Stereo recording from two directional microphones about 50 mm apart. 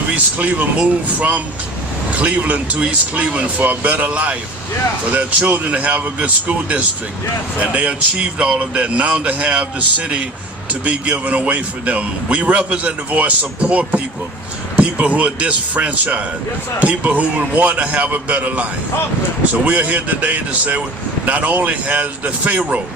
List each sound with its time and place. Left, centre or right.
0.3 s a man's voice: right